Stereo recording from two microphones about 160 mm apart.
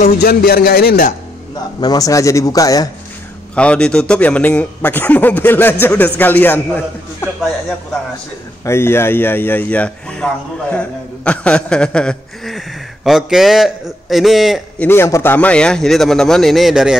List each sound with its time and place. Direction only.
0.2 s a man's voice: 75° left (ahead or behind)
1.5 s a man's voice: 25° left (ahead or behind)
3.5 s a man's voice: 5° left (ahead or behind)
8.6 s a man's voice: 15° left (ahead or behind); by 14.9 s centre (ahead or behind)
14.9 s a man's voice: 15° left (ahead or behind); by 17.0 s 5° right (ahead or behind)